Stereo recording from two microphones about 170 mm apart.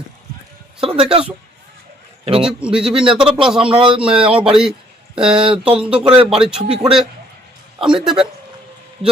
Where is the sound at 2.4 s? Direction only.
5° right (ahead or behind).